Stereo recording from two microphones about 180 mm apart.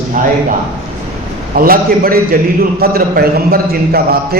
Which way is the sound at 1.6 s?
55° right (ahead or behind).